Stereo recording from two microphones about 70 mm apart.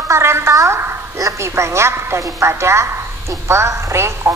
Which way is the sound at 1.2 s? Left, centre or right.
Right.